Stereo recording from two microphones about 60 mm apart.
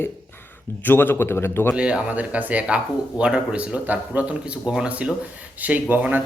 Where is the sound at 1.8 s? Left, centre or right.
Centre.